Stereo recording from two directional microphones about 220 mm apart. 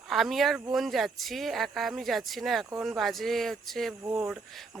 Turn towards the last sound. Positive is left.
turn(degrees=-5)  # may be behind; listen again after turning